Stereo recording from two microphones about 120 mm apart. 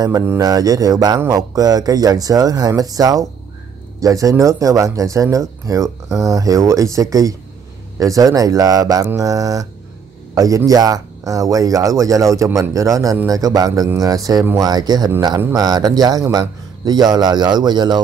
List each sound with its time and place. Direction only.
0.4 s speech: 30° right (ahead or behind)